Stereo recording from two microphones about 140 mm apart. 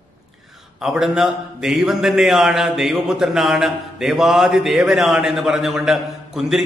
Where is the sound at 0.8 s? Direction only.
5° right (ahead or behind).